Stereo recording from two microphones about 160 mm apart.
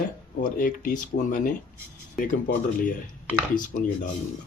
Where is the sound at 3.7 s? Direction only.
65° left (ahead or behind).